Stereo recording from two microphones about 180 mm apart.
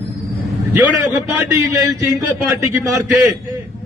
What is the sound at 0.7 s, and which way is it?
A man's voice, 10° right (ahead or behind).